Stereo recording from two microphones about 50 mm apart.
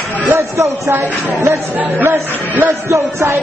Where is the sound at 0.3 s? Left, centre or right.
Right.